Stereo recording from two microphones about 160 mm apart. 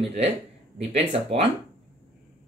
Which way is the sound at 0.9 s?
40° right (ahead or behind).